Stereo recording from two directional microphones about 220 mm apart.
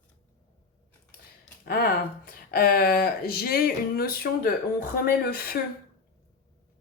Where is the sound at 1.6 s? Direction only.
45° left (ahead or behind).